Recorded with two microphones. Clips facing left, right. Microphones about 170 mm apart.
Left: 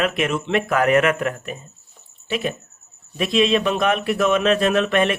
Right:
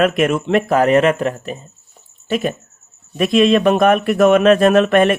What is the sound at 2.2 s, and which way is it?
Speech, 45° right (ahead or behind).